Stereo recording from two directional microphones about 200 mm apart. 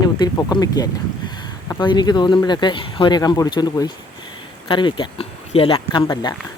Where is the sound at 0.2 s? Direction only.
20° left (ahead or behind).